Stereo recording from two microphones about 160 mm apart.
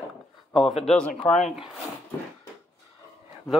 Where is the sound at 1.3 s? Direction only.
45° left (ahead or behind).